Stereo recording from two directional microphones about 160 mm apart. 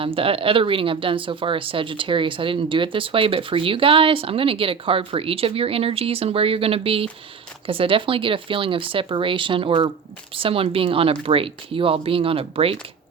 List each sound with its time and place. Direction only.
0.0 s speech: 35° right (ahead or behind)